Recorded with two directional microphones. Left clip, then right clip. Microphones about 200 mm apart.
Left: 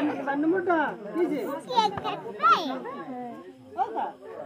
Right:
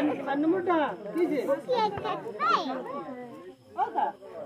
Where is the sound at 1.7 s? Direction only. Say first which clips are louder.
Left 2 dB; 55° left (ahead or behind).